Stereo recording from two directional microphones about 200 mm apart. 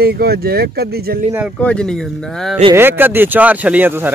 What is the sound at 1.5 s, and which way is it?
Speech, 5° left (ahead or behind).